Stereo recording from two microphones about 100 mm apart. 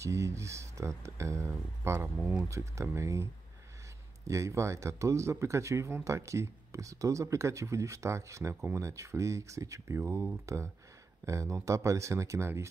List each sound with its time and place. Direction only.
0.0 s speech: 30° right (ahead or behind)
4.3 s speech: 30° right (ahead or behind)